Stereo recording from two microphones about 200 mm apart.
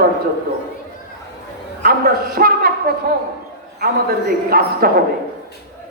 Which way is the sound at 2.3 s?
50° right (ahead or behind).